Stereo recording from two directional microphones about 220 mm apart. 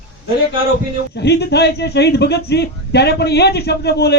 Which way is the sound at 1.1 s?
50° left (ahead or behind).